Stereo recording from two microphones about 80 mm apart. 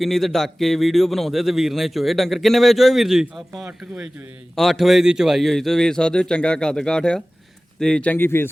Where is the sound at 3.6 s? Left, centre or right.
Centre.